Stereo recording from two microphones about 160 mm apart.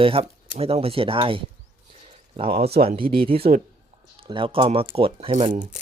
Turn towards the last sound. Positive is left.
turn(degrees=-45)  # may be behind; listen again after turning